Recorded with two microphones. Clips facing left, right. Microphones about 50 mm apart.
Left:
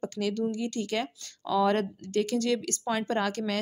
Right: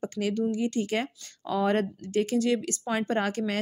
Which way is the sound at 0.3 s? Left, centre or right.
Centre.